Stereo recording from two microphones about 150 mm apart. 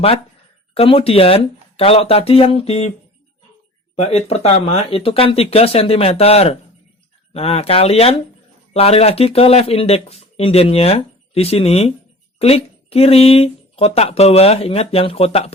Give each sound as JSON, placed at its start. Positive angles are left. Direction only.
{"t": 0.7, "sound": "speech", "side_deg": 40}
{"t": 3.9, "sound": "speech", "side_deg": 45}